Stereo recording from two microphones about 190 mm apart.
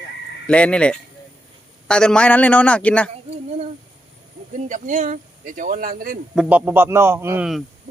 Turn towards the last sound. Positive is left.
turn(degrees=-5)  # may be behind; listen again after turning